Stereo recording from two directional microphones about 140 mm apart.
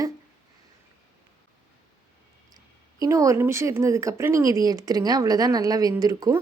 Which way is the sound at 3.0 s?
20° right (ahead or behind).